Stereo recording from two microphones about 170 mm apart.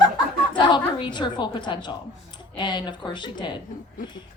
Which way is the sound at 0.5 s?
25° left (ahead or behind).